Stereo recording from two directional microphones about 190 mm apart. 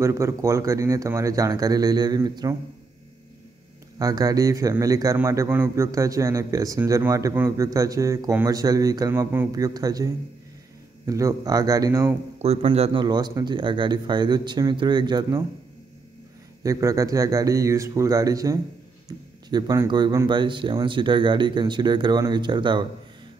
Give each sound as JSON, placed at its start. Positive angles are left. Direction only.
{"t": 0.0, "sound": "a man's voice", "side_deg": -15}
{"t": 4.0, "sound": "a man's voice", "side_deg": -20}
{"t": 12.4, "sound": "speech", "side_deg": -35}
{"t": 16.6, "sound": "a man's voice", "side_deg": -15}